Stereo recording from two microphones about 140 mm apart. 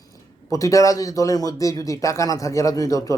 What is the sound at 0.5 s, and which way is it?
Speech, 25° left (ahead or behind).